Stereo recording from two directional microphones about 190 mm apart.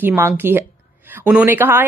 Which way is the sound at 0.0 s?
10° right (ahead or behind).